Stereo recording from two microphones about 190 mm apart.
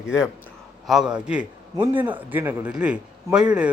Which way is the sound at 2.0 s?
10° right (ahead or behind).